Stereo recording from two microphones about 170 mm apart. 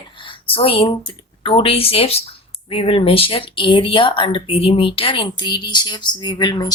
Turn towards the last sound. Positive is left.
turn(degrees=25)  # may be behind; listen again after turning